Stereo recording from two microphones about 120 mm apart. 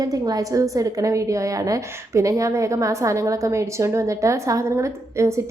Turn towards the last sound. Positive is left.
turn(degrees=-25)  # may be behind; listen again after turning